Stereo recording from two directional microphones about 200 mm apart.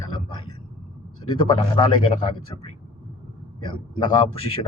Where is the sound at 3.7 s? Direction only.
25° left (ahead or behind).